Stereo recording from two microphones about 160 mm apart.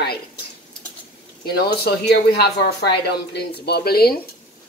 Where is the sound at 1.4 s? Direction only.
80° left.